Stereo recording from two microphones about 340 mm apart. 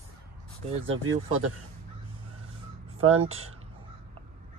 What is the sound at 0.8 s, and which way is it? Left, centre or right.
Speech, right.